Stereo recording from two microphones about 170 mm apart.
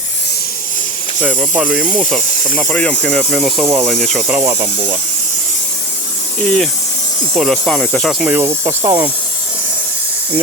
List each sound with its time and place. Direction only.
1.2 s speech: 5° right (ahead or behind)
4.4 s speech: 10° right (ahead or behind)
6.4 s speech: 5° left (ahead or behind)
8.2 s speech: 10° right (ahead or behind)